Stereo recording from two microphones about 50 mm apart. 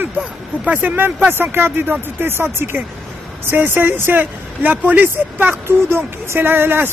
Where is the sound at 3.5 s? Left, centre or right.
Right.